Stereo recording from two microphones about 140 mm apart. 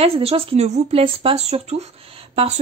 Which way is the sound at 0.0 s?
45° right (ahead or behind).